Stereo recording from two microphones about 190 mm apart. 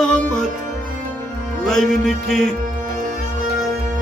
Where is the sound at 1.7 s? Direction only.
Centre (ahead or behind).